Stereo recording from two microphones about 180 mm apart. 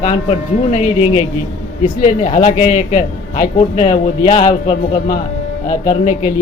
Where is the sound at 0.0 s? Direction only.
40° left (ahead or behind).